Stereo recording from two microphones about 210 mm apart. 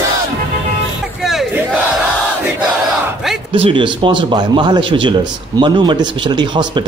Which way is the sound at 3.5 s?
25° right (ahead or behind).